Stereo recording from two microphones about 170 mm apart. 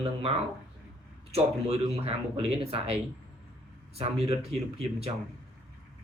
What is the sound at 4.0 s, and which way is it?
Speech, 35° right (ahead or behind).